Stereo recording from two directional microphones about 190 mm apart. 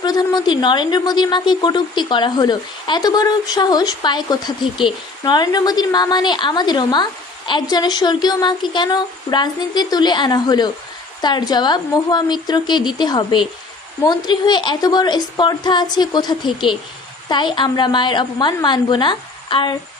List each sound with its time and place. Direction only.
0.0 s a woman's voice: 20° left (ahead or behind)